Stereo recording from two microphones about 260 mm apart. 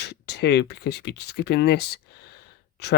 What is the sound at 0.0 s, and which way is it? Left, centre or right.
Speech, left.